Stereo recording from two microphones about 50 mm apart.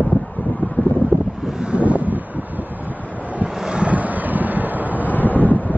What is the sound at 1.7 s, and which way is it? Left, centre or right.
Wind noise, right.